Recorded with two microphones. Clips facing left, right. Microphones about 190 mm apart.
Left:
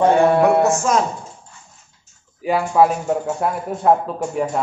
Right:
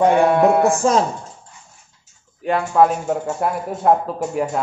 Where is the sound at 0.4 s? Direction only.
30° right (ahead or behind).